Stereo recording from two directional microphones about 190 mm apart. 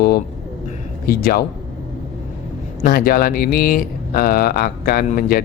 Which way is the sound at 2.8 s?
50° left (ahead or behind).